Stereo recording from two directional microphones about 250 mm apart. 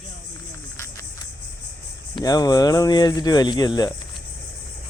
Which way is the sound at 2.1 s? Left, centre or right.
Centre.